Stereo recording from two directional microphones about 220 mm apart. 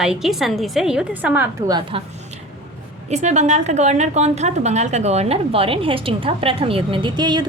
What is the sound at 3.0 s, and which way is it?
A woman's voice, 30° right (ahead or behind).